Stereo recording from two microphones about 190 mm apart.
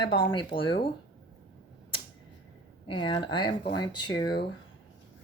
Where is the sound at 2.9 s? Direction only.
25° left (ahead or behind).